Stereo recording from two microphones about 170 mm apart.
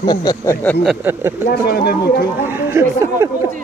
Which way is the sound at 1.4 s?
65° left (ahead or behind).